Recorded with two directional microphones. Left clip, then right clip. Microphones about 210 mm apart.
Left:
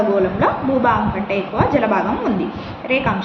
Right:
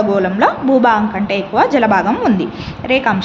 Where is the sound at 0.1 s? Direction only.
55° right (ahead or behind).